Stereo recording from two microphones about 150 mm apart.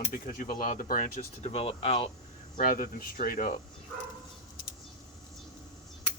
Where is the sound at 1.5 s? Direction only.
45° left (ahead or behind).